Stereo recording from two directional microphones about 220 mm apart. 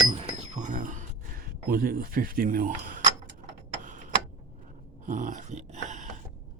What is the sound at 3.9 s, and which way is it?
Tick-tock, 35° right (ahead or behind).